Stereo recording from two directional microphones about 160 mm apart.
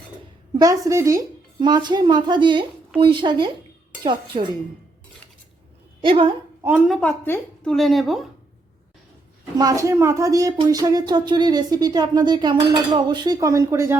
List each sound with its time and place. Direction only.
0.6 s speech: 20° right (ahead or behind)
6.0 s a woman's voice: 30° right (ahead or behind)
6.6 s a woman's voice: 10° right (ahead or behind)
6.9 s a woman's voice: 5° left (ahead or behind)
9.6 s speech: 20° right (ahead or behind)